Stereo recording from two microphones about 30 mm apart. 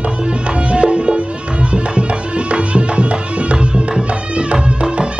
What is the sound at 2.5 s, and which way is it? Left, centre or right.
Music, right.